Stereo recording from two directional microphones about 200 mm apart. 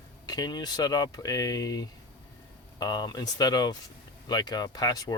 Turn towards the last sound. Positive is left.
turn(degrees=20)  # may be behind; listen again after turning